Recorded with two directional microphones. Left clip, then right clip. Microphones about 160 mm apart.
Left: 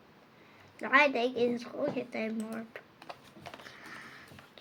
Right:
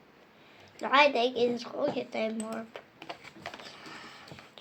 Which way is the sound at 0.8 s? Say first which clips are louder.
Right 2 dB; 5° left (ahead or behind).